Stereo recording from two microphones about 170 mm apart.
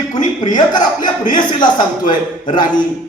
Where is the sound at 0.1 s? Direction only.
45° left (ahead or behind).